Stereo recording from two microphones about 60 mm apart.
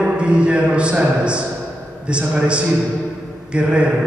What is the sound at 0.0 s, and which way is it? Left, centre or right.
A man's voice, centre.